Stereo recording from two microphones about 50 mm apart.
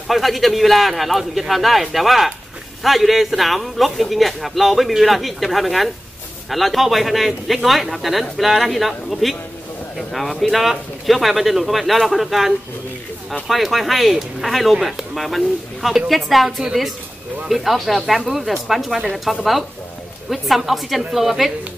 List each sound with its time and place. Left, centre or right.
0.1 s a man's voice: centre